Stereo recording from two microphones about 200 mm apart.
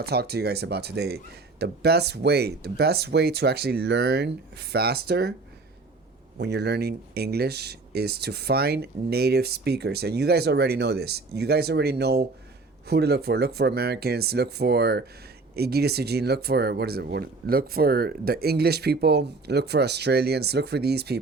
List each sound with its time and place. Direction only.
0.0 s speech: 55° right (ahead or behind)
6.4 s speech: 55° right (ahead or behind)